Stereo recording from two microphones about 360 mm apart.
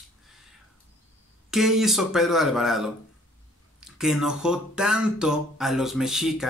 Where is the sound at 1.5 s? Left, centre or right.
Centre.